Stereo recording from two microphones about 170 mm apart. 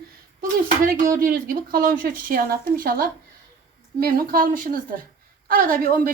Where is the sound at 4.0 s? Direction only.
60° right (ahead or behind).